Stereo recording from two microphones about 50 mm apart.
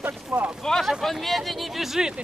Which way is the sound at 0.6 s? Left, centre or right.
Centre.